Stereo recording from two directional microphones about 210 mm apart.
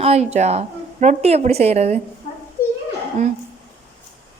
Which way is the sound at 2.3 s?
35° left (ahead or behind).